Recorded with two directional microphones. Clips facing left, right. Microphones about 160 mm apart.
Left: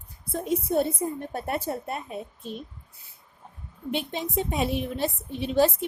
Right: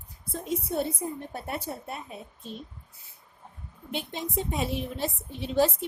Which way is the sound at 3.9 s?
65° left (ahead or behind).